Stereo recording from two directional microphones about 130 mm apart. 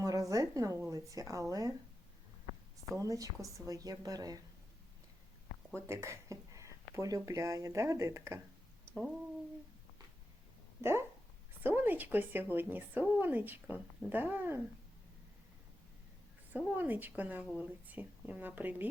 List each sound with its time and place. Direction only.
0.0 s a sound: 25° right (ahead or behind)
2.9 s a woman's voice: 25° right (ahead or behind)
5.8 s speech: 20° right (ahead or behind)
10.8 s speech: 20° right (ahead or behind)
16.5 s speech: 15° right (ahead or behind)